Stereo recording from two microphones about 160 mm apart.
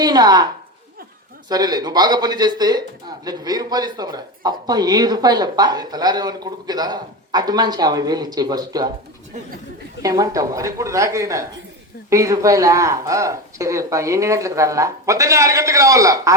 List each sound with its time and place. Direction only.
0.0 s speech: 25° right (ahead or behind)
1.5 s speech: 25° right (ahead or behind)
10.0 s speech: 20° right (ahead or behind)